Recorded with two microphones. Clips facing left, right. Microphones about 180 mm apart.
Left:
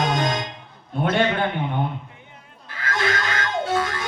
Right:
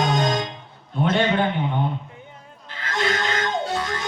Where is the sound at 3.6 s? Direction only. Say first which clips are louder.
Left 3 dB; 50° left (ahead or behind).